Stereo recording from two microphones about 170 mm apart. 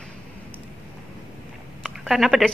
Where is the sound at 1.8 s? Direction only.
Centre (ahead or behind).